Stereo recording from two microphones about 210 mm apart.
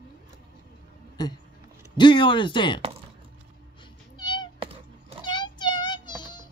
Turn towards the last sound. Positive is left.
turn(degrees=20)  # may be behind; listen again after turning